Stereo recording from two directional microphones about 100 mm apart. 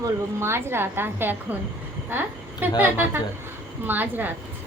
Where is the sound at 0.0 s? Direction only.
25° right (ahead or behind).